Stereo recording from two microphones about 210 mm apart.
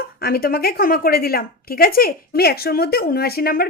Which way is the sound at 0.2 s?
45° left (ahead or behind).